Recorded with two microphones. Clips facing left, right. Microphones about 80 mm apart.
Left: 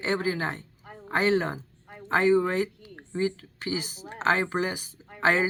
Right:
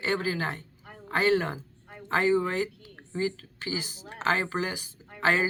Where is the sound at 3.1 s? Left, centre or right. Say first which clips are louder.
Left 2 dB; left.